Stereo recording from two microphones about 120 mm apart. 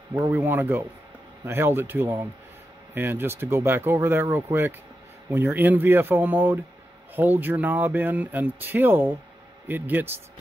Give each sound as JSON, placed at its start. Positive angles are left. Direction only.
{"t": 0.3, "sound": "speech", "side_deg": -15}